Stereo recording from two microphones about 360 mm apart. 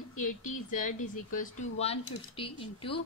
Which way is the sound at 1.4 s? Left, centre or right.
Left.